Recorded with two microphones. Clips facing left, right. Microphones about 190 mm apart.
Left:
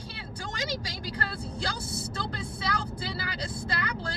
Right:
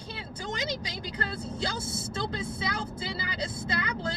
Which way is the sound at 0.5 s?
20° right (ahead or behind).